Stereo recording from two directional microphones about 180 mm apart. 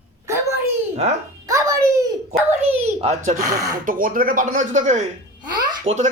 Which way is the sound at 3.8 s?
50° right (ahead or behind).